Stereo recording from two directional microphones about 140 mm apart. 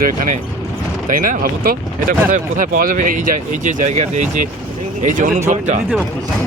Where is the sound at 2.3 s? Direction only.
70° right (ahead or behind).